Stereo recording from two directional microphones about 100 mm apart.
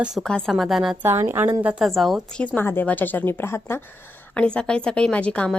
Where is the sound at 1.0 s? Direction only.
25° right (ahead or behind).